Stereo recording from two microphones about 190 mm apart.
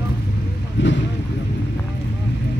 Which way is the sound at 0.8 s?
75° left (ahead or behind).